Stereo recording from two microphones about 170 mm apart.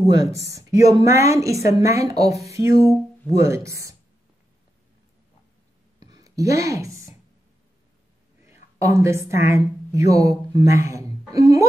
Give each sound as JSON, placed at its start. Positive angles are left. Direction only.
{"t": 0.1, "sound": "speech", "side_deg": -20}
{"t": 2.2, "sound": "speech", "side_deg": 40}
{"t": 2.5, "sound": "speech", "side_deg": -15}
{"t": 5.9, "sound": "a sound", "side_deg": -25}
{"t": 8.7, "sound": "a woman's voice", "side_deg": -20}